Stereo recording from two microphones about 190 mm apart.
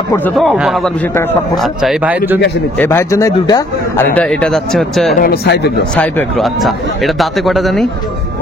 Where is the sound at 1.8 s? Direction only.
5° right (ahead or behind).